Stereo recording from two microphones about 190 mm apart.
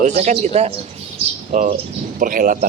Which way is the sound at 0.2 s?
35° right (ahead or behind).